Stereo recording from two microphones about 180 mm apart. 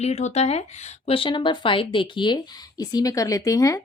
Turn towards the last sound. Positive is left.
turn(degrees=20)  # may be behind; listen again after turning